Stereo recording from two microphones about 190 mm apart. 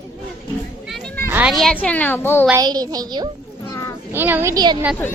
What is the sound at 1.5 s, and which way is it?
Speech, centre (ahead or behind).